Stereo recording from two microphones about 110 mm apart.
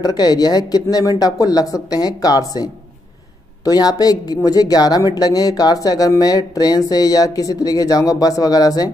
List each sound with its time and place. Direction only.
0.0 s speech: 35° left (ahead or behind)